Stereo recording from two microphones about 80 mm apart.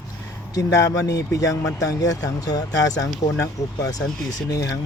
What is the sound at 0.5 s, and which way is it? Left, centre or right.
Speech, left.